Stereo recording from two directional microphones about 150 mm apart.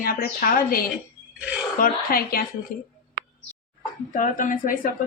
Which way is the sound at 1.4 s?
10° right (ahead or behind).